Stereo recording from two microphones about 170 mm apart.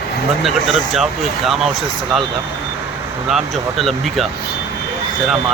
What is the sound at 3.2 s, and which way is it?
Speech, centre (ahead or behind).